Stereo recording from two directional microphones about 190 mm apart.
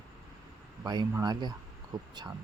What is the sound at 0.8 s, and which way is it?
Speech, 20° right (ahead or behind).